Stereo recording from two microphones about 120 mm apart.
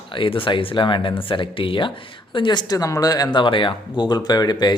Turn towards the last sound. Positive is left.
turn(degrees=35)  # may be behind; listen again after turning